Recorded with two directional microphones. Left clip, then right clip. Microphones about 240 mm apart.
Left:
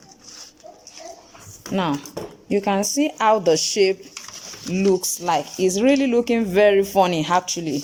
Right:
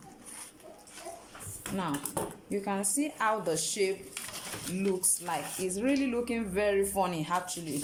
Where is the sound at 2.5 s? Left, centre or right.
Left.